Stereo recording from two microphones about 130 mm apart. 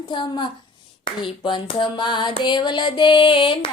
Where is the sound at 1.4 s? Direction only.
35° left (ahead or behind).